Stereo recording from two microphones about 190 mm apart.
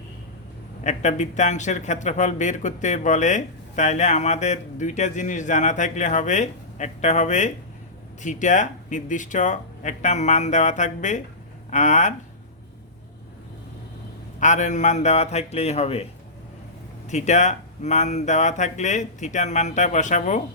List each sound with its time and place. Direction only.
0.9 s speech: 40° left (ahead or behind)
14.3 s speech: 40° left (ahead or behind)
17.1 s speech: 40° left (ahead or behind)